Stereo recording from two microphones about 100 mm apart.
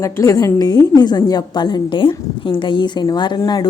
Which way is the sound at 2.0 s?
60° left (ahead or behind).